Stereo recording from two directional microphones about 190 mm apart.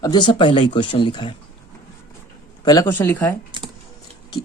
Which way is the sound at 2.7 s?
15° left (ahead or behind).